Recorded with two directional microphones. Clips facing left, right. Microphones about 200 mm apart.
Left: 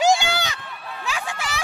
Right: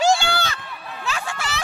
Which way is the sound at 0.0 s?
15° left (ahead or behind).